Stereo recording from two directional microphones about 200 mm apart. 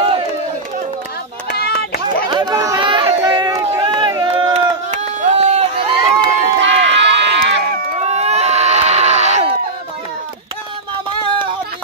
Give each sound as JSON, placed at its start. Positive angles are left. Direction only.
{"t": 1.5, "sound": "a sound", "side_deg": 50}
{"t": 2.2, "sound": "chatter", "side_deg": -20}
{"t": 3.7, "sound": "run", "side_deg": -20}
{"t": 6.6, "sound": "run", "side_deg": -60}
{"t": 8.0, "sound": "screaming", "side_deg": -35}